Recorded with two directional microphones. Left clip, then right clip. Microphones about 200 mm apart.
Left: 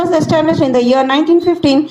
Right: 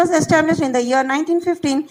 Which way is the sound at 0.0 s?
45° right (ahead or behind).